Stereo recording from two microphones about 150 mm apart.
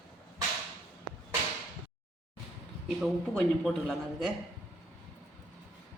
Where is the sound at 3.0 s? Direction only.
Centre (ahead or behind).